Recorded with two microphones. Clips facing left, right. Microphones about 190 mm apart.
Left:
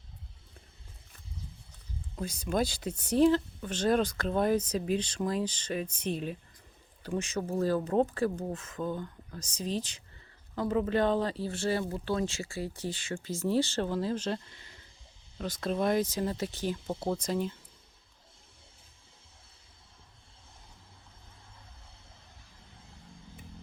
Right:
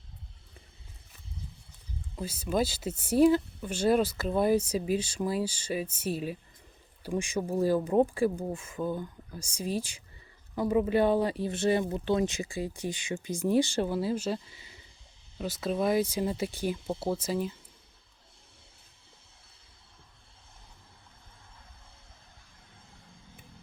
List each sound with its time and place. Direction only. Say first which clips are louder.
2.1 s speech: right 1 dB; 5° right (ahead or behind)